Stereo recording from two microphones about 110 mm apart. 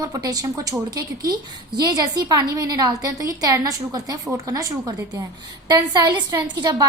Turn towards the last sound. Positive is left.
turn(degrees=-35)  # may be behind; listen again after turning